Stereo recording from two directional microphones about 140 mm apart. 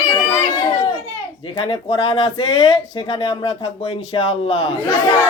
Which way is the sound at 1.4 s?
35° left (ahead or behind).